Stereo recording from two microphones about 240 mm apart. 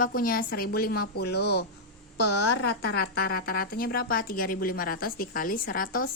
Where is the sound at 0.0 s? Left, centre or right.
Left.